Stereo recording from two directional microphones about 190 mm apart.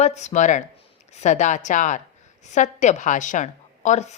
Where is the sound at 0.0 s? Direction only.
35° left (ahead or behind).